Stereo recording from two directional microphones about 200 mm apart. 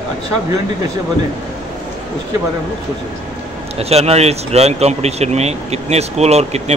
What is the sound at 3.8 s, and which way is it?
Speech, 30° right (ahead or behind).